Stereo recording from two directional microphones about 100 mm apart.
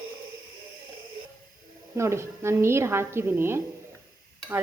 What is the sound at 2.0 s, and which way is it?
Dishes, 25° right (ahead or behind).